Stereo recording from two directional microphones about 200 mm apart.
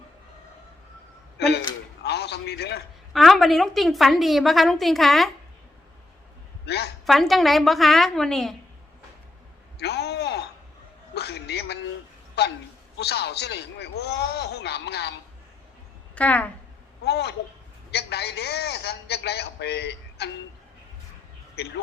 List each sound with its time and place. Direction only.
1.4 s a sound: 55° left (ahead or behind)
3.1 s a woman's voice: centre (ahead or behind)
6.7 s a man's voice: 55° left (ahead or behind)
7.0 s a woman's voice: centre (ahead or behind)
9.7 s a sound: 55° left (ahead or behind)
11.1 s a man's voice: 55° left (ahead or behind)
16.1 s speech: 5° left (ahead or behind)
17.0 s a man's voice: 55° left (ahead or behind)
21.6 s a man's voice: 55° left (ahead or behind)